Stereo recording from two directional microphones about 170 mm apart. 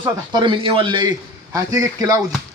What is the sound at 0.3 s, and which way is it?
A man's voice, 30° right (ahead or behind).